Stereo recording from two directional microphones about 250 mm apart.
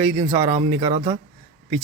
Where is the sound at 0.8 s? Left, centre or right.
Centre.